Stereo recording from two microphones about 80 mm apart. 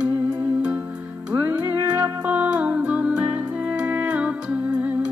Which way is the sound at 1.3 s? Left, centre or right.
Right.